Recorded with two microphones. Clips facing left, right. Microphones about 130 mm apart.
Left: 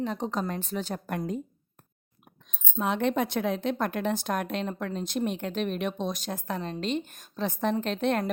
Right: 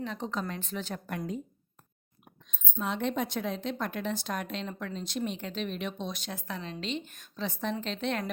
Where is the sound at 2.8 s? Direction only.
60° left (ahead or behind).